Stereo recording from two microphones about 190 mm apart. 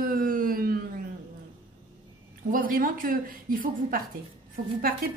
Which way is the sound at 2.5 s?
50° right (ahead or behind).